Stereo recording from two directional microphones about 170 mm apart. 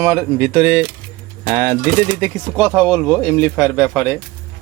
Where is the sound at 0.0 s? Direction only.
10° right (ahead or behind).